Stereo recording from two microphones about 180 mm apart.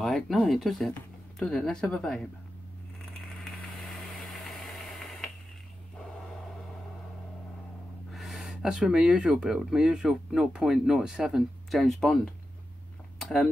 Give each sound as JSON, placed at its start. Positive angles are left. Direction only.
{"t": 0.0, "sound": "speech", "side_deg": 0}
{"t": 3.1, "sound": "vehicle", "side_deg": 0}
{"t": 8.1, "sound": "speech", "side_deg": 0}
{"t": 13.2, "sound": "speech", "side_deg": 5}